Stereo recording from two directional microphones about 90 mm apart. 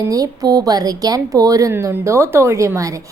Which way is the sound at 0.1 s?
45° right (ahead or behind).